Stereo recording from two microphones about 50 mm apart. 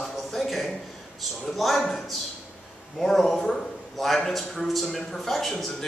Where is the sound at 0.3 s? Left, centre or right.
Centre.